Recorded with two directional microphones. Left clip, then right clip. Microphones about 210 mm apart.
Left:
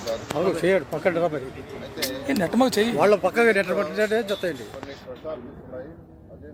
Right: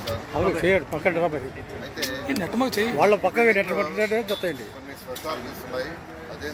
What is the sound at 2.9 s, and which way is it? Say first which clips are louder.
Speech: right 1 dB; 15° left (ahead or behind).